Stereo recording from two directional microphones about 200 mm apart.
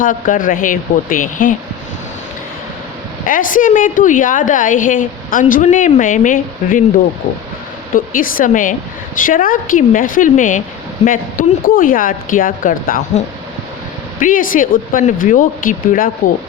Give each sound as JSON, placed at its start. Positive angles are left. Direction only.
{"t": 0.0, "sound": "speech", "side_deg": 40}
{"t": 3.2, "sound": "a woman's voice", "side_deg": 45}
{"t": 7.9, "sound": "speech", "side_deg": 45}